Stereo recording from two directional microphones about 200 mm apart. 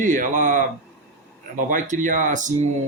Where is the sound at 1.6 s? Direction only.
40° right (ahead or behind).